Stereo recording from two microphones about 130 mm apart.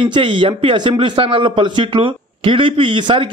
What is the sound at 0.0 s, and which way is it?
A man's voice, 40° right (ahead or behind).